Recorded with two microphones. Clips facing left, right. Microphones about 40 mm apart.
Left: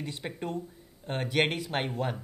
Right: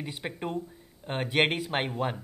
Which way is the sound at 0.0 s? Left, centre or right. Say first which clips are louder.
Right 1 dB; centre.